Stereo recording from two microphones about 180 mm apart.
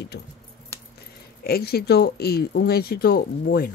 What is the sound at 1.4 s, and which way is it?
Speech, 60° left (ahead or behind).